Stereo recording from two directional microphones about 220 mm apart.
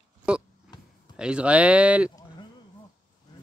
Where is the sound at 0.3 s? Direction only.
5° right (ahead or behind).